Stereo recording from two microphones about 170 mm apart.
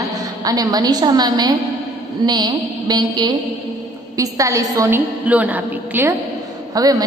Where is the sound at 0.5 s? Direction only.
20° right (ahead or behind).